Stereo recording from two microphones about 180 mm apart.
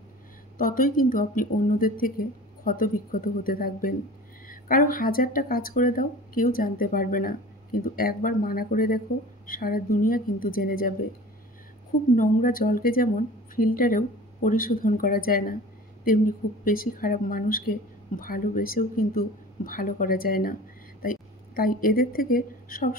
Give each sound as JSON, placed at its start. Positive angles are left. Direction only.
{"t": 0.6, "sound": "speech", "side_deg": 50}
{"t": 12.2, "sound": "speech", "side_deg": 50}